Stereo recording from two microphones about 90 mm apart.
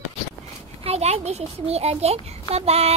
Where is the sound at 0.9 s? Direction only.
90° right.